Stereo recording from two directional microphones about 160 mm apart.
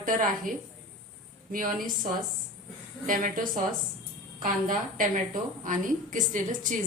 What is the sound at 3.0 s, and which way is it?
Speech, 55° right (ahead or behind).